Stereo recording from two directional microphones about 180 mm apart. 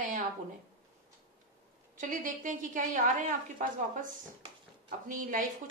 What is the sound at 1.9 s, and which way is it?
A woman's voice, 45° right (ahead or behind).